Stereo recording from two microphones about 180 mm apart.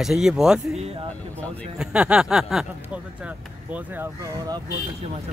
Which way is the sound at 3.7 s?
10° right (ahead or behind).